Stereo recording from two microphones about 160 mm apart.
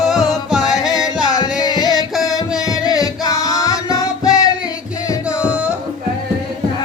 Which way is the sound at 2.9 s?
25° left (ahead or behind).